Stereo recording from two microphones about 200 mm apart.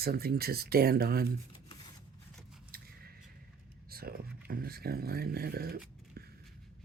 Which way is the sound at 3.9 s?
50° right (ahead or behind).